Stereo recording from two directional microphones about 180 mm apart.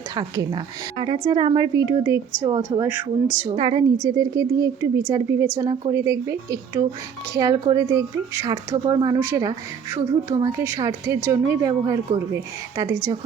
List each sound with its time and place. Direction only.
0.1 s a woman's voice: 25° right (ahead or behind)
3.5 s a woman's voice: 30° right (ahead or behind)